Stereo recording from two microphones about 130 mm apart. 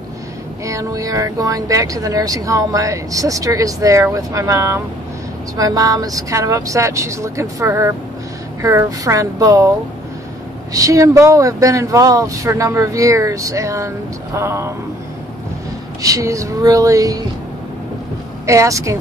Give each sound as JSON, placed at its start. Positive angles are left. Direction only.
{"t": 0.7, "sound": "speech", "side_deg": -25}
{"t": 10.7, "sound": "speech", "side_deg": -25}
{"t": 16.0, "sound": "speech", "side_deg": -25}
{"t": 18.4, "sound": "speech", "side_deg": -20}